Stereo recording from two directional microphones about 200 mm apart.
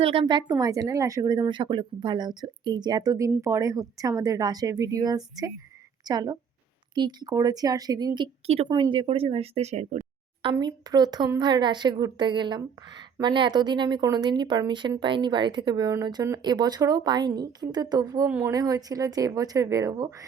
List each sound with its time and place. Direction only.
0.0 s a woman's voice: 25° right (ahead or behind)
10.5 s a woman's voice: 20° right (ahead or behind)